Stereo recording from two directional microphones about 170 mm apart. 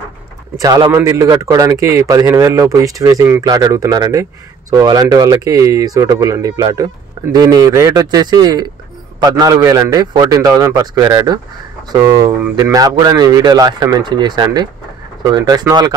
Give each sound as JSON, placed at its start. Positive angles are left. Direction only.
{"t": 0.6, "sound": "speech", "side_deg": -25}